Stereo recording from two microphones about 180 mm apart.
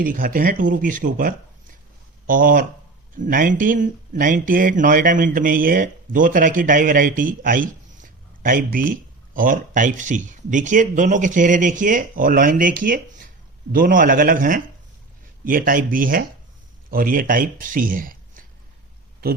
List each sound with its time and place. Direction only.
0.0 s speech: 50° right (ahead or behind)